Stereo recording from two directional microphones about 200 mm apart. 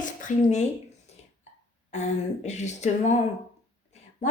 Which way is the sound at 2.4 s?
35° left (ahead or behind).